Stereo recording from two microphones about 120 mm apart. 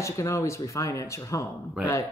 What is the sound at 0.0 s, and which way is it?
Speech, 25° left (ahead or behind).